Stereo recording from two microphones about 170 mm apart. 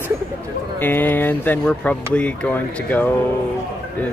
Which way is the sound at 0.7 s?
10° left (ahead or behind).